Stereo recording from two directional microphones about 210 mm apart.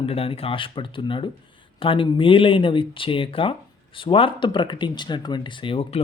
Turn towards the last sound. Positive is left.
turn(degrees=25)  # may be behind; listen again after turning